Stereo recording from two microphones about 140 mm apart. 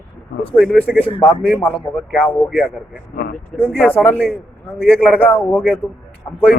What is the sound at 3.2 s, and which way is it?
Speech, 90° left.